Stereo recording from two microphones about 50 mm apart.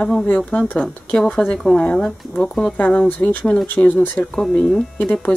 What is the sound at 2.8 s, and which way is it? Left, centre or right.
Speech, left.